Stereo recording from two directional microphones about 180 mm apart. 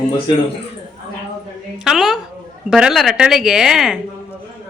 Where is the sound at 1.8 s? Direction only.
Centre (ahead or behind).